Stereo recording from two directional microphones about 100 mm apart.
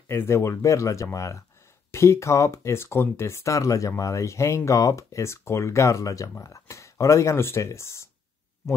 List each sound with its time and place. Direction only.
0.1 s speech: 25° left (ahead or behind)